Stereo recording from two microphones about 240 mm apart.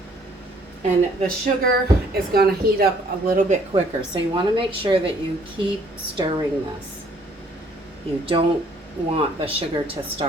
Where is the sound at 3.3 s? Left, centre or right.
Right.